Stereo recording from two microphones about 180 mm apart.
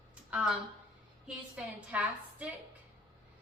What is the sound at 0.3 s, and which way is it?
Speech, 5° right (ahead or behind).